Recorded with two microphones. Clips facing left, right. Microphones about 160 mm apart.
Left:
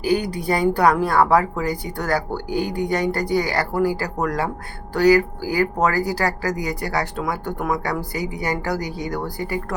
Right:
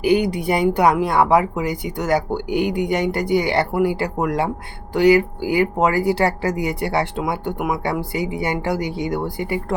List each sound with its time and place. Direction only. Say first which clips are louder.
0.0 s speech: right 4 dB; 20° right (ahead or behind)